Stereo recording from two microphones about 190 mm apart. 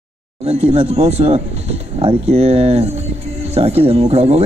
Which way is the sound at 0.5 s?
30° right (ahead or behind).